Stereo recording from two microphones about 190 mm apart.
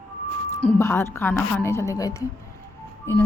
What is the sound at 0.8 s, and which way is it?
A woman's voice, 10° left (ahead or behind).